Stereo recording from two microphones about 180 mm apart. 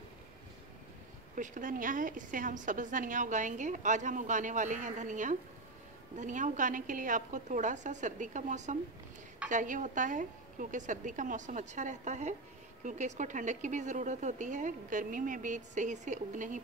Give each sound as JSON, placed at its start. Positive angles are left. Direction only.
{"t": 1.3, "sound": "a woman's voice", "side_deg": -45}